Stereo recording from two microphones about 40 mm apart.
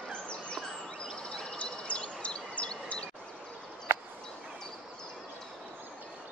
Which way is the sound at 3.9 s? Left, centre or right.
Right.